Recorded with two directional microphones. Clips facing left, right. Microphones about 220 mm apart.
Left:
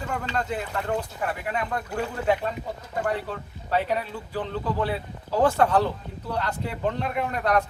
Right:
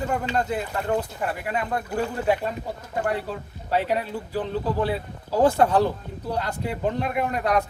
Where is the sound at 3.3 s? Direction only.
10° right (ahead or behind).